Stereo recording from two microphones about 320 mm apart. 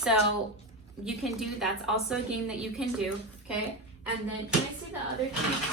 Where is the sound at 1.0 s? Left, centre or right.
Centre.